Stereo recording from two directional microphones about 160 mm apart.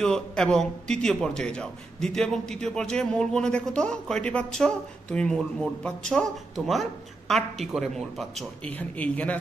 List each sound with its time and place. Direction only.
0.0 s a man's voice: 5° left (ahead or behind)